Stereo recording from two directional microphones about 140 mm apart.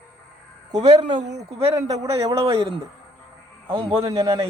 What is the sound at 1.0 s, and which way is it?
Speech, 55° right (ahead or behind).